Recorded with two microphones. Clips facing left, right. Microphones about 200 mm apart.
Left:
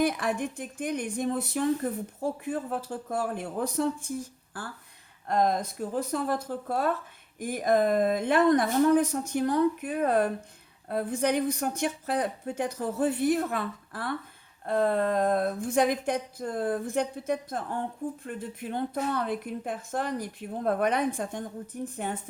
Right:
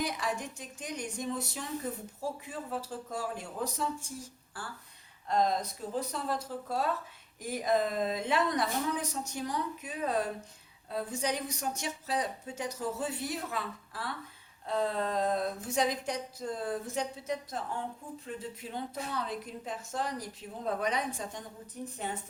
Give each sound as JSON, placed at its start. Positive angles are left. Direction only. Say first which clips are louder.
{"t": 0.0, "sound": "speech", "louder": "left 7 dB", "side_deg": 55}
{"t": 5.3, "sound": "speech", "louder": "left 3 dB", "side_deg": 55}